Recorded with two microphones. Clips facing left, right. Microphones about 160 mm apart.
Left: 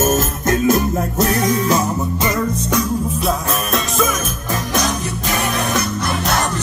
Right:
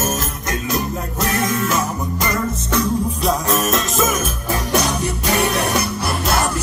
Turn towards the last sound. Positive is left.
turn(degrees=-10)  # may be behind; listen again after turning